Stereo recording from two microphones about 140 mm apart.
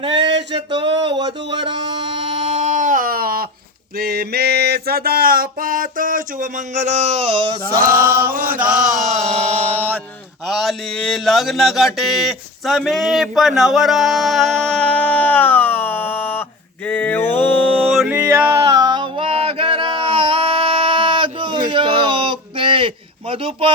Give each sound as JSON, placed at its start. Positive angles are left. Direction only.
{"t": 0.0, "sound": "music", "side_deg": -40}
{"t": 4.9, "sound": "a sound", "side_deg": -90}
{"t": 7.8, "sound": "chant", "side_deg": -90}
{"t": 8.0, "sound": "chant", "side_deg": -15}
{"t": 8.3, "sound": "chant", "side_deg": -90}
{"t": 9.0, "sound": "music", "side_deg": -55}
{"t": 10.4, "sound": "a sound", "side_deg": 0}
{"t": 16.8, "sound": "mantra", "side_deg": 10}
{"t": 17.9, "sound": "music", "side_deg": 0}
{"t": 18.2, "sound": "a sound", "side_deg": -20}
{"t": 18.7, "sound": "a sound", "side_deg": -30}
{"t": 23.3, "sound": "speech", "side_deg": -40}